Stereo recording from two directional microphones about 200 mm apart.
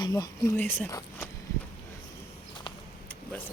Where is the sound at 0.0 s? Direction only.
20° left (ahead or behind).